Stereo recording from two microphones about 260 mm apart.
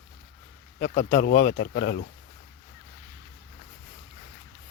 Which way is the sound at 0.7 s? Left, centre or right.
Left.